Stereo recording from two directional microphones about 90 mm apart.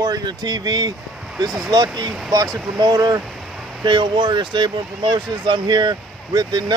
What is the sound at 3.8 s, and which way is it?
Speech, 60° right (ahead or behind).